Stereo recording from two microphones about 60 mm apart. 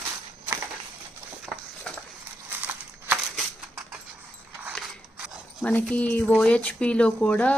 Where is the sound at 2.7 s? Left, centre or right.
Right.